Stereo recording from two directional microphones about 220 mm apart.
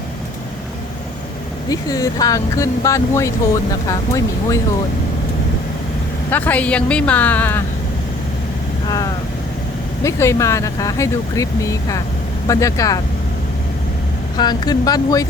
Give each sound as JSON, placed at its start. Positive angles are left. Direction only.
{"t": 1.7, "sound": "speech", "side_deg": 15}
{"t": 6.3, "sound": "speech", "side_deg": 5}
{"t": 10.0, "sound": "speech", "side_deg": 15}
{"t": 14.3, "sound": "speech", "side_deg": 20}